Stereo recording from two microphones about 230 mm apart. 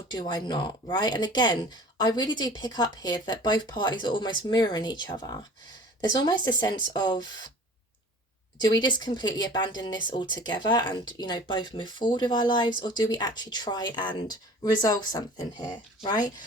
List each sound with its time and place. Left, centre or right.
0.1 s speech: centre
8.6 s speech: centre